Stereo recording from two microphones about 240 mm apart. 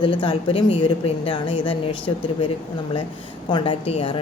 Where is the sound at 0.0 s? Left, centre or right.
Left.